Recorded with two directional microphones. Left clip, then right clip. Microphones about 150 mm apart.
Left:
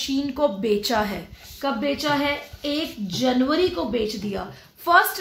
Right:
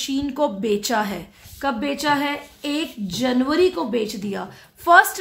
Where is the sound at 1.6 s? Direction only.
65° right (ahead or behind).